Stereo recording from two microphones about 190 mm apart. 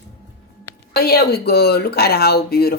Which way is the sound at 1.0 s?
55° left (ahead or behind).